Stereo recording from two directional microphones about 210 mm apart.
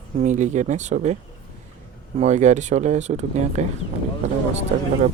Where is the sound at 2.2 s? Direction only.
35° right (ahead or behind).